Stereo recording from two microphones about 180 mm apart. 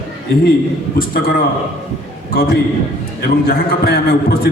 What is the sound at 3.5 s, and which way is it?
A man's voice, 60° left (ahead or behind).